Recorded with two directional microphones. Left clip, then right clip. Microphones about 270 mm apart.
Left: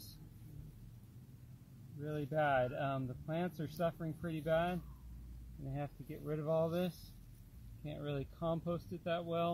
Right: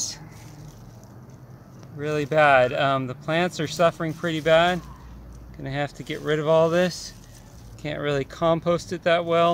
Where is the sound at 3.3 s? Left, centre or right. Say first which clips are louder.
Right 18 dB; centre.